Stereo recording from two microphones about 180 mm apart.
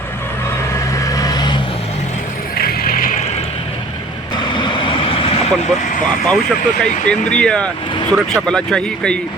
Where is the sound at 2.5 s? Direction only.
55° left (ahead or behind).